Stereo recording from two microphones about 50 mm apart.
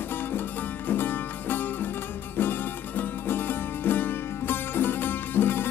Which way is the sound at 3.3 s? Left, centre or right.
Left.